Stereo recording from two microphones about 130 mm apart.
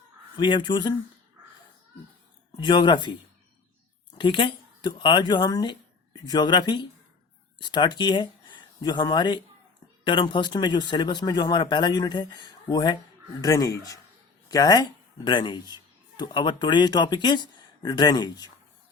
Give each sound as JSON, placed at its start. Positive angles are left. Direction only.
{"t": 0.3, "sound": "speech", "side_deg": 35}
{"t": 2.6, "sound": "speech", "side_deg": 35}
{"t": 4.2, "sound": "speech", "side_deg": 40}